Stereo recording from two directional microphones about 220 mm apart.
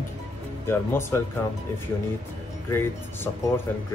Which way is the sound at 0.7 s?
10° left (ahead or behind).